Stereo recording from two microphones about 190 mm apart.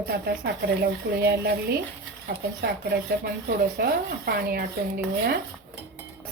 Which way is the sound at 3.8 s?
55° right (ahead or behind).